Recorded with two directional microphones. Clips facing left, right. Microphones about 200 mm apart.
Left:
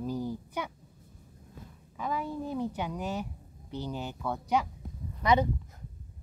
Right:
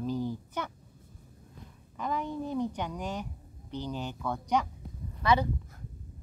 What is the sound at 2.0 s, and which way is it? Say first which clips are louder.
A woman's voice: even; 5° left (ahead or behind).